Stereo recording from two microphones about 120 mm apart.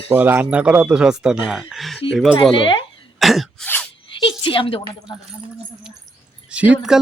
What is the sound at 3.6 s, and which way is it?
Speech, 10° left (ahead or behind).